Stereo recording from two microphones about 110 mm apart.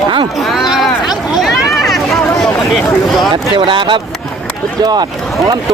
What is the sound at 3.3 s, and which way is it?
Speech, 50° right (ahead or behind).